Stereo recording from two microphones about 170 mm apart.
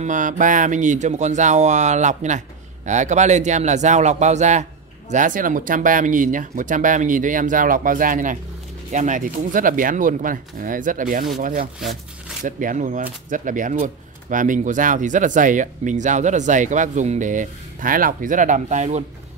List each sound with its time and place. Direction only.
0.0 s speech: 50° right (ahead or behind)